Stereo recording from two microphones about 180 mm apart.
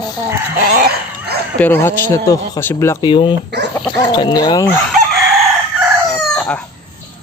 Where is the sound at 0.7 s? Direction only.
60° right (ahead or behind).